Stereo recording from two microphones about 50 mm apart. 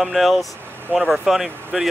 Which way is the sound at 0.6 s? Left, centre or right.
Right.